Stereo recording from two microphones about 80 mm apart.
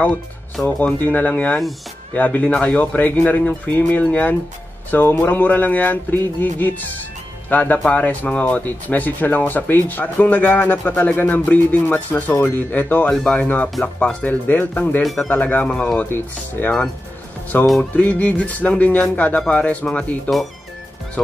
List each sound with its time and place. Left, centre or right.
0.7 s speech: left
16.1 s speech: left